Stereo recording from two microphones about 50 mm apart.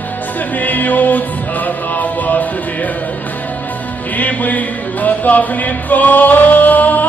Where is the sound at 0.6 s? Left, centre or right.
Left.